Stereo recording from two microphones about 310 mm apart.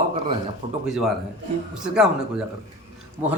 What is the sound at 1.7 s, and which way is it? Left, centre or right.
Speech, centre.